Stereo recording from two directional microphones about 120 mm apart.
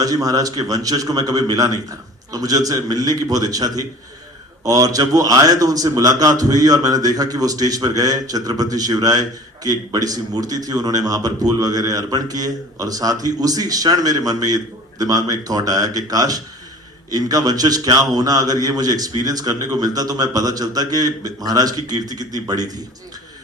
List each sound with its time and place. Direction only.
0.0 s a man's voice: 30° right (ahead or behind)